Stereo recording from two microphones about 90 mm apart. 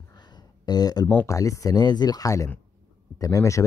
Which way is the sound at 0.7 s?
45° left (ahead or behind).